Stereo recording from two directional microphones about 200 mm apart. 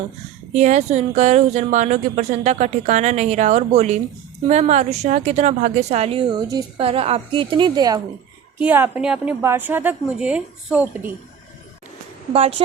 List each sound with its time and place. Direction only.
0.5 s a woman's voice: 35° right (ahead or behind); by 8.0 s 20° right (ahead or behind)
8.5 s a woman's voice: 10° right (ahead or behind)
12.3 s a woman's voice: 30° right (ahead or behind)